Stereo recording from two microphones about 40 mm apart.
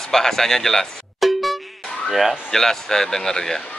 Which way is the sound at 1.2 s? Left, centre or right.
Centre.